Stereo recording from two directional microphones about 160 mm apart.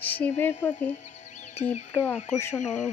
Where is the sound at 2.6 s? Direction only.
50° left (ahead or behind).